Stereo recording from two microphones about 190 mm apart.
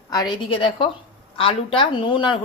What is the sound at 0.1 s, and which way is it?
A woman's voice, 20° left (ahead or behind).